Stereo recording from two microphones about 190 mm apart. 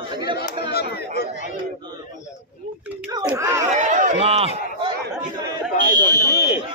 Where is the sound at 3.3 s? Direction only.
15° right (ahead or behind).